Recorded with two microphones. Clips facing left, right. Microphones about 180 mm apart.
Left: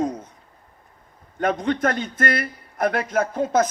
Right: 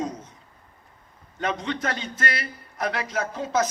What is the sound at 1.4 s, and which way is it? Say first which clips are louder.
A man's voice: left 6 dB; 50° left (ahead or behind).